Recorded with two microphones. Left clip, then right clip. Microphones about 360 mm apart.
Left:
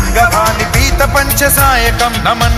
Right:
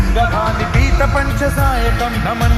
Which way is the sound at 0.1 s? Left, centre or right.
Left.